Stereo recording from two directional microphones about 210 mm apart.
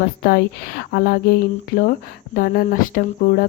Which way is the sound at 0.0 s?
45° left (ahead or behind).